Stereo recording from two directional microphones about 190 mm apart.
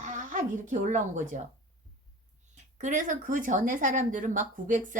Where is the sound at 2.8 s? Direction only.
40° right (ahead or behind).